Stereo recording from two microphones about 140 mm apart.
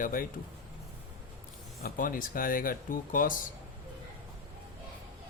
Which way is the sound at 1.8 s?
85° left.